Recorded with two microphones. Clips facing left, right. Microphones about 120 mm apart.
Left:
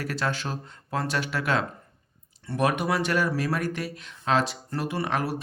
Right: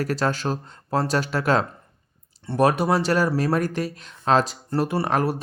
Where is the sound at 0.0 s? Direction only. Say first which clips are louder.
Right 6 dB; 40° right (ahead or behind).